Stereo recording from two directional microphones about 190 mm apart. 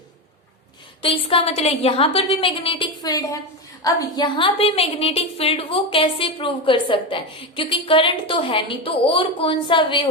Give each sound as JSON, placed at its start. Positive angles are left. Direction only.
{"t": 1.0, "sound": "a woman's voice", "side_deg": 30}